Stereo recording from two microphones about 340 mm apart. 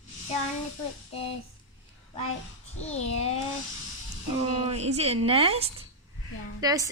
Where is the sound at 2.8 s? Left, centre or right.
Centre.